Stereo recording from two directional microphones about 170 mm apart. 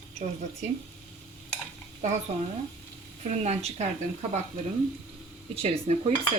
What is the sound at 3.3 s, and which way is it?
Speech, 40° right (ahead or behind).